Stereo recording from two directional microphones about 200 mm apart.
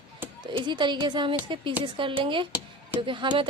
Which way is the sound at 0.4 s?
25° right (ahead or behind).